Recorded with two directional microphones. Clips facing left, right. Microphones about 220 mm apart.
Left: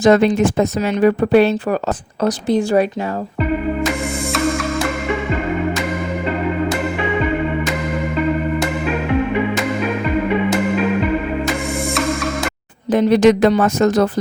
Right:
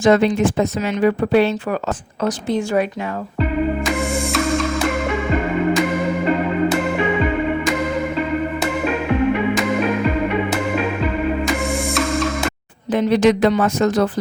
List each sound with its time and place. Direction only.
0.0 s speech: 40° left (ahead or behind)
12.9 s speech: 40° left (ahead or behind)